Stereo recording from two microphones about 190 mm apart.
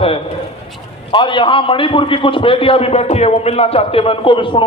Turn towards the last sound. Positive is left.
turn(degrees=25)  # may be behind; listen again after turning